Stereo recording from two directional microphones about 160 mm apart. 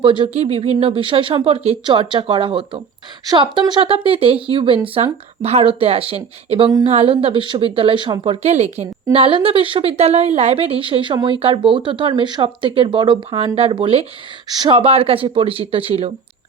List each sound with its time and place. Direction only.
0.0 s speech: 30° right (ahead or behind)